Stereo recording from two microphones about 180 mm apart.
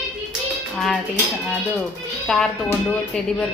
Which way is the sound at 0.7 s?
Centre (ahead or behind).